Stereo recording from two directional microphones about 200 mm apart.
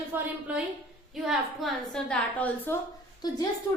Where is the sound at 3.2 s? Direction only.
20° left (ahead or behind).